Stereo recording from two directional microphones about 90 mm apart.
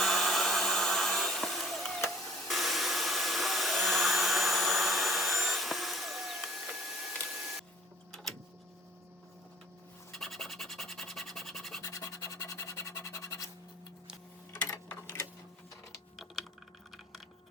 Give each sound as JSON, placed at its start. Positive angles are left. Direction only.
{"t": 0.0, "sound": "hair dryer", "side_deg": 0}
{"t": 2.5, "sound": "vacuum cleaner", "side_deg": 0}
{"t": 8.1, "sound": "printer", "side_deg": 5}
{"t": 10.1, "sound": "scratch", "side_deg": 5}
{"t": 11.9, "sound": "scratch", "side_deg": 35}
{"t": 16.1, "sound": "typing", "side_deg": 0}